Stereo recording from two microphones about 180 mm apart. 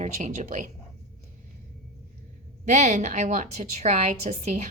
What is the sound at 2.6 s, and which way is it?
A woman's voice, 40° right (ahead or behind).